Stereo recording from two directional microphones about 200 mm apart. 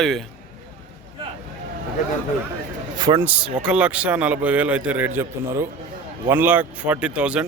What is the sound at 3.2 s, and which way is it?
A man's voice, 5° right (ahead or behind).